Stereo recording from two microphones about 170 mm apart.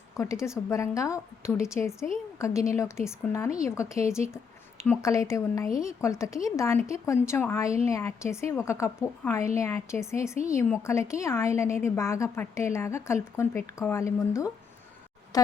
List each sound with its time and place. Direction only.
0.2 s a woman's voice: 15° left (ahead or behind)